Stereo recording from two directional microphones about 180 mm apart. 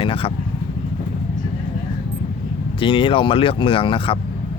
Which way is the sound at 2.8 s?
30° left (ahead or behind).